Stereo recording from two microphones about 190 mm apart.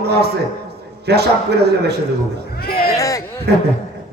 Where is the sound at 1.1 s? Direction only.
60° right (ahead or behind).